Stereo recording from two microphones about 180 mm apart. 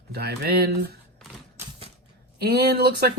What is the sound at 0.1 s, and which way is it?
Speech, 60° right (ahead or behind).